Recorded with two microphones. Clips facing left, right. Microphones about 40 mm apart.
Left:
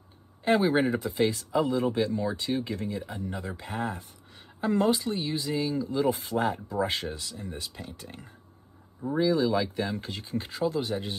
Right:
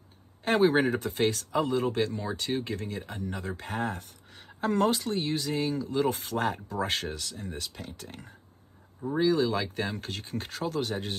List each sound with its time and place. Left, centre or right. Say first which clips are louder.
0.5 s a woman's voice: even; right
9.2 s speech: left 1 dB; right